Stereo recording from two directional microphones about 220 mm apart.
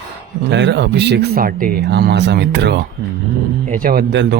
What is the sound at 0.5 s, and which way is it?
Speech, 55° right (ahead or behind).